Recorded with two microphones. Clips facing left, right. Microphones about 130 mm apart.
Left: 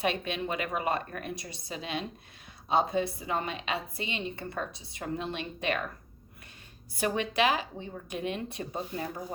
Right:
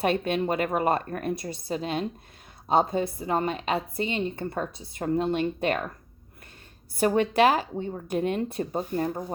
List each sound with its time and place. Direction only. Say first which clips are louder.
0.0 s speech: right 6 dB; 50° right (ahead or behind)
7.0 s speech: right 7 dB; 45° right (ahead or behind)